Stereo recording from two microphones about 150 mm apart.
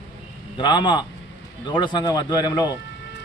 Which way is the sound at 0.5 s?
30° left (ahead or behind).